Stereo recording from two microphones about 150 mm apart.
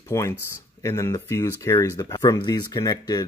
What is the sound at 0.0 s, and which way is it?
Speech, 20° left (ahead or behind).